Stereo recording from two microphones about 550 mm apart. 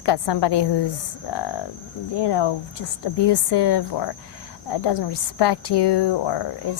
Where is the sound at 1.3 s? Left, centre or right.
Left.